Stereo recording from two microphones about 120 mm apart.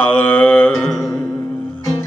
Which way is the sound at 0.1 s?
15° left (ahead or behind).